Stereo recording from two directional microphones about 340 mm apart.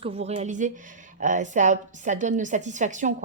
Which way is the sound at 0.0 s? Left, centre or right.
Centre.